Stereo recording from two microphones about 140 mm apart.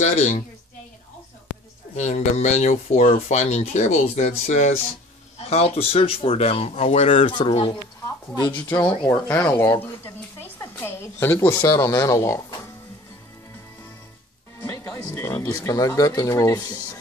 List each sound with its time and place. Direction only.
0.0 s a woman's voice: 55° left (ahead or behind)
2.0 s speech: 55° left (ahead or behind)
5.5 s speech: 45° left (ahead or behind)
8.5 s speech: 15° left (ahead or behind)
8.7 s speech: 30° left (ahead or behind)
9.3 s speech: 15° left (ahead or behind)
14.6 s speech: 25° left (ahead or behind)